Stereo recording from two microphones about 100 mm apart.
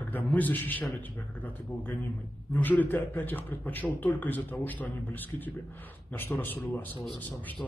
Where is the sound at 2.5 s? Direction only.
15° left (ahead or behind).